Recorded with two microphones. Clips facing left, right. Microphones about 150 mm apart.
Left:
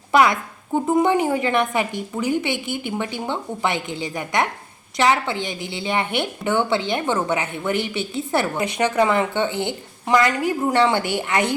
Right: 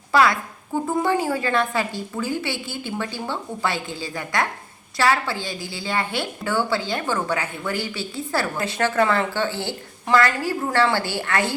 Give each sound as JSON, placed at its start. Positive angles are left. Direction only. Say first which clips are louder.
{"t": 0.1, "sound": "a woman's voice", "louder": "left 2 dB", "side_deg": 20}